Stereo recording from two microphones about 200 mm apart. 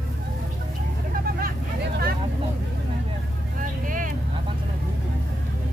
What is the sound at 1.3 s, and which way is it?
Vehicle, 50° right (ahead or behind).